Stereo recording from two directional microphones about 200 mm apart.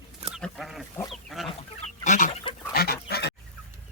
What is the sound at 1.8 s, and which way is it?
Goose, 40° left (ahead or behind).